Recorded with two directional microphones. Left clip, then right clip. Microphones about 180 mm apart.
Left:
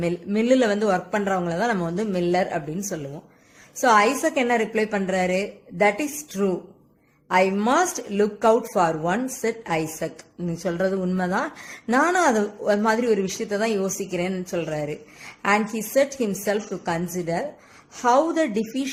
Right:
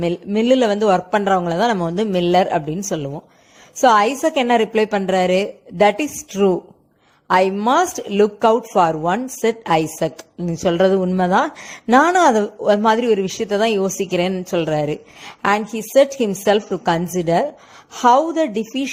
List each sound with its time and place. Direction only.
0.3 s a woman's voice: 30° right (ahead or behind)